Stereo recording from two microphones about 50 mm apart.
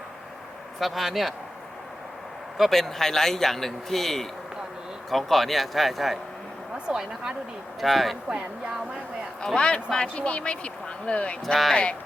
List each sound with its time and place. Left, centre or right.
0.8 s speech: centre
2.6 s a man's voice: centre
6.8 s a woman's voice: centre
7.8 s speech: centre
8.3 s a woman's voice: centre
9.6 s speech: centre
11.4 s speech: centre
11.7 s speech: left